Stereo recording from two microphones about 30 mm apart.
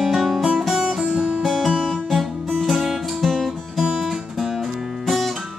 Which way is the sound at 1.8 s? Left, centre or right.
Centre.